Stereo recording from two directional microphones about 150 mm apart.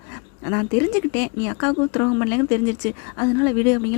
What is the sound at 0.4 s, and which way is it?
Speech, 20° left (ahead or behind).